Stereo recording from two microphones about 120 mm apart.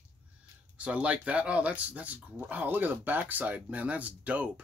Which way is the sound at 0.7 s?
10° right (ahead or behind).